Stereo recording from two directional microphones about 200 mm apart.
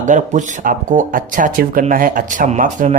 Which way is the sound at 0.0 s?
40° right (ahead or behind).